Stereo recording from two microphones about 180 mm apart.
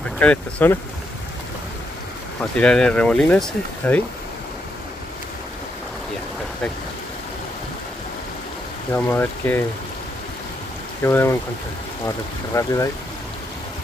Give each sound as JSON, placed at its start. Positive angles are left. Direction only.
{"t": 0.2, "sound": "speech", "side_deg": 10}
{"t": 2.6, "sound": "speech", "side_deg": 5}
{"t": 8.9, "sound": "speech", "side_deg": 10}
{"t": 11.0, "sound": "speech", "side_deg": 15}
{"t": 12.5, "sound": "speech", "side_deg": 15}